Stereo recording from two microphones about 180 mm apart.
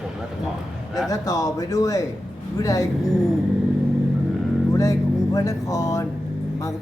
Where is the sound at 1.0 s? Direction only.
20° left (ahead or behind).